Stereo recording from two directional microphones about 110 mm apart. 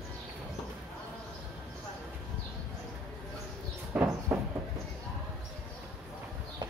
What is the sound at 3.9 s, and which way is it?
Train, 15° right (ahead or behind).